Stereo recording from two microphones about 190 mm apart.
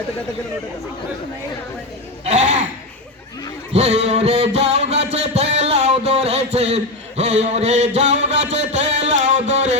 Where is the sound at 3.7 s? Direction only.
35° right (ahead or behind).